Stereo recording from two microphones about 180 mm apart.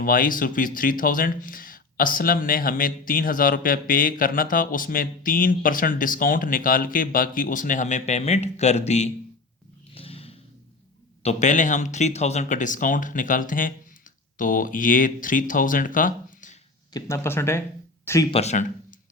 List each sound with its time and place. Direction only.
0.0 s speech: 50° left (ahead or behind)
9.9 s a sound: 30° left (ahead or behind)
11.2 s speech: 40° left (ahead or behind)
16.9 s speech: 15° left (ahead or behind)
18.3 s speech: 35° left (ahead or behind)